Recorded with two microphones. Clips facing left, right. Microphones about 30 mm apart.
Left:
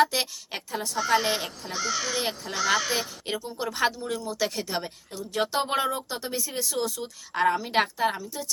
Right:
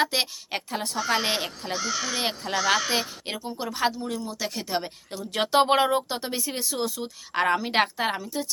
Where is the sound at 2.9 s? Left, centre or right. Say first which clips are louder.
Right 1 dB; centre.